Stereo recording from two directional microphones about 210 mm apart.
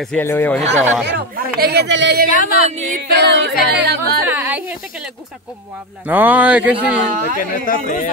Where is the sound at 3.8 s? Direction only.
50° right (ahead or behind).